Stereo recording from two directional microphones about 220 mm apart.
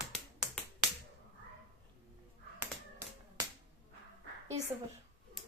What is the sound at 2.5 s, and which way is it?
Tap, 10° right (ahead or behind).